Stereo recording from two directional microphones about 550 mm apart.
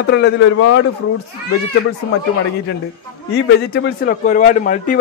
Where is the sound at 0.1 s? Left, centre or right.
Centre.